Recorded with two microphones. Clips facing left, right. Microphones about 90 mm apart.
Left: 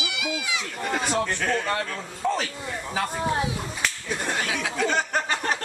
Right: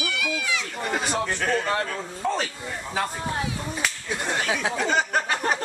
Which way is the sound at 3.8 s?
Centre (ahead or behind).